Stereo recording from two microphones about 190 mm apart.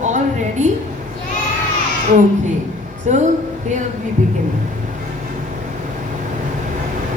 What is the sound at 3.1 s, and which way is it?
Speech, 40° right (ahead or behind).